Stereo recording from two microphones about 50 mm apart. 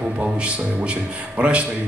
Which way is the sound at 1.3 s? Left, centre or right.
Right.